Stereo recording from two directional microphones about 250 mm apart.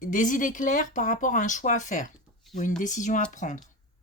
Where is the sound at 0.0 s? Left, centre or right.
Left.